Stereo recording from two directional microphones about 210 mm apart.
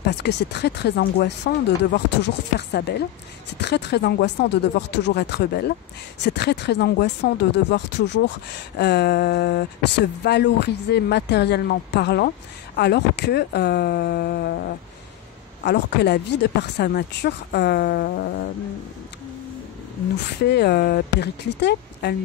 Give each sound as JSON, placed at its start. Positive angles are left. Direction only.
{"t": 0.0, "sound": "speech", "side_deg": 55}
{"t": 15.6, "sound": "speech", "side_deg": 50}
{"t": 20.4, "sound": "speech", "side_deg": 50}